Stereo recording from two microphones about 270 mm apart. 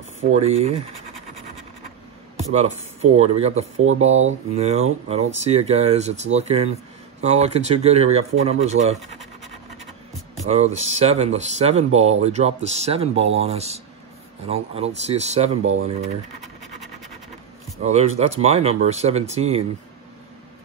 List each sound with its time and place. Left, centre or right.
0.2 s speech: right
2.3 s speech: right
10.4 s speech: right
15.6 s speech: right
17.8 s speech: right